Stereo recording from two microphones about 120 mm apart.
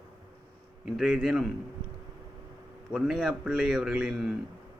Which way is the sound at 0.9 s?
5° right (ahead or behind).